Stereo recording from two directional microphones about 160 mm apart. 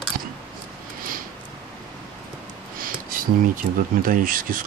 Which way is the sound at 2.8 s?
60° right (ahead or behind).